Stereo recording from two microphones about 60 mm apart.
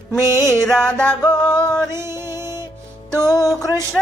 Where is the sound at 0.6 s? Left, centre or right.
Centre.